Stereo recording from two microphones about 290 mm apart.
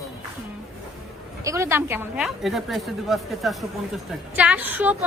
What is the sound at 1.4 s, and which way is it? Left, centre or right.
A woman's voice, centre.